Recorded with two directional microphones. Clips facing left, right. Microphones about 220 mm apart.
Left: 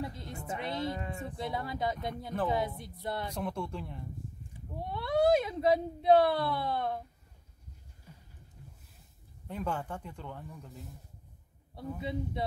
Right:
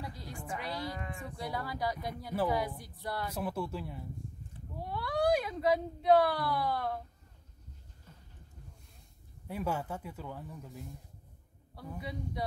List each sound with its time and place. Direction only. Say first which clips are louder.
0.0 s music: left 5 dB; 25° left (ahead or behind)
0.5 s speech: left 4 dB; 25° left (ahead or behind)
3.3 s speech: even; 5° right (ahead or behind)
4.8 s speech: left 3 dB; 25° left (ahead or behind)
8.1 s a sound: left 3 dB; 10° left (ahead or behind)
9.5 s speech: right 1 dB; 10° right (ahead or behind)
12.0 s speech: left 3 dB; 25° left (ahead or behind)